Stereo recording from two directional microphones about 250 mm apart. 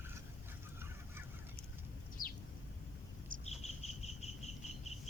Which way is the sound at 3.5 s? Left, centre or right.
Left.